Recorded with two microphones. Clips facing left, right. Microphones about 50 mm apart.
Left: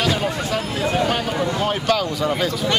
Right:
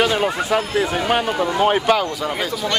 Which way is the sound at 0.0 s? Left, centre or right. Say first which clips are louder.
Right 3 dB; right.